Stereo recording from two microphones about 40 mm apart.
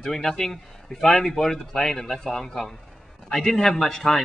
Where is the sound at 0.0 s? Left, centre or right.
Centre.